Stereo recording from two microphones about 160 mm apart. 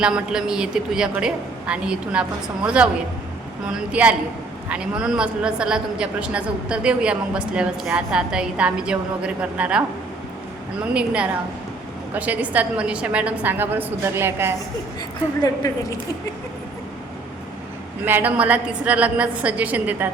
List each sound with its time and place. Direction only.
0.0 s a woman's voice: 5° right (ahead or behind)
10.9 s a woman's voice: 5° right (ahead or behind)
15.6 s speech: 20° left (ahead or behind)
18.0 s a woman's voice: 10° right (ahead or behind)